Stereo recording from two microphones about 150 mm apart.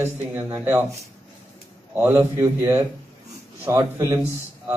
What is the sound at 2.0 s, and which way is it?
A man's voice, 15° right (ahead or behind).